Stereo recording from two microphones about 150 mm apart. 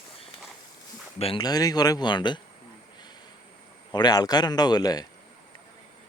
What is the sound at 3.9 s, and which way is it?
Speech, 25° left (ahead or behind).